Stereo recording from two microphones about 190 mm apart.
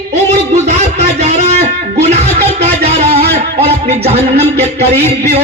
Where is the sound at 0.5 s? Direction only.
35° right (ahead or behind).